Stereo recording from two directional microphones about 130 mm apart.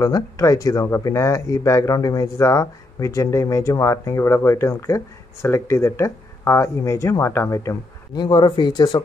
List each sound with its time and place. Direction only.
0.0 s speech: 25° left (ahead or behind)